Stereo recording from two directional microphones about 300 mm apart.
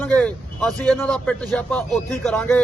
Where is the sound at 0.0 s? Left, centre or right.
Centre.